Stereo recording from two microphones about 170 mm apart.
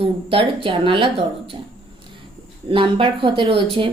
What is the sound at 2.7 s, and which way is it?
A woman's voice, 30° right (ahead or behind).